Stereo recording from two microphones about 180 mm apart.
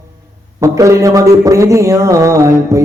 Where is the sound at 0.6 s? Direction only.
15° right (ahead or behind).